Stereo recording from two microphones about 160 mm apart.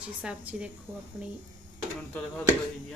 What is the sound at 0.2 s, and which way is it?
Speech, 5° right (ahead or behind).